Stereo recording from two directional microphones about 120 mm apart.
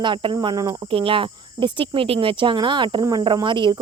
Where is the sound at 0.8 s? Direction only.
45° right (ahead or behind).